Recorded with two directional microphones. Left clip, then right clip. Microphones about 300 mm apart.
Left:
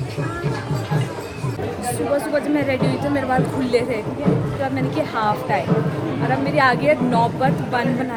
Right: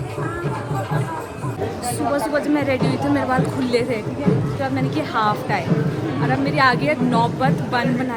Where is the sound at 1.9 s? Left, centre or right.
Centre.